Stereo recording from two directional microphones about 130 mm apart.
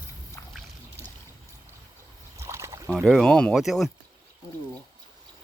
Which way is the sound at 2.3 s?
20° right (ahead or behind).